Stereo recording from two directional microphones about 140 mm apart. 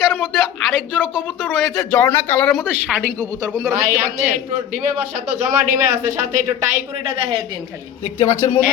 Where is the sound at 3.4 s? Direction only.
5° right (ahead or behind).